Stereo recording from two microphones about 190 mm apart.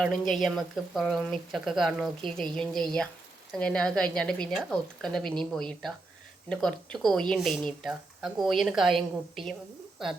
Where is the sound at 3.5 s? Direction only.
5° left (ahead or behind).